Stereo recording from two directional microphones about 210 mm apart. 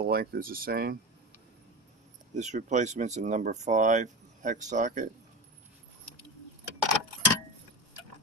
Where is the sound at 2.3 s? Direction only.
35° right (ahead or behind).